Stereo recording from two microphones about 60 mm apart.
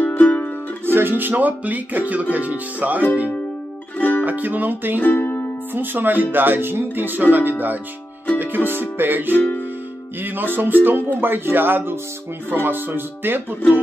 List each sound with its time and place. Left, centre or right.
0.0 s music: left
0.9 s music: right
4.2 s music: right
5.0 s music: left
5.7 s speech: right
9.3 s music: left
10.2 s speech: right